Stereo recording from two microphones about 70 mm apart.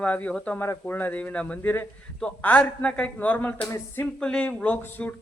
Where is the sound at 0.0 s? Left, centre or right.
Centre.